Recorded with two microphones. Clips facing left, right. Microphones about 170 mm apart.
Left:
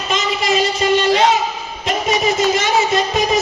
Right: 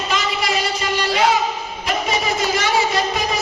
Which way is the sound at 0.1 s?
25° left (ahead or behind).